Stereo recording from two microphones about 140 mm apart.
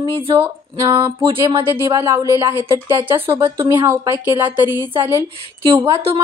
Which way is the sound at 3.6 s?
25° right (ahead or behind).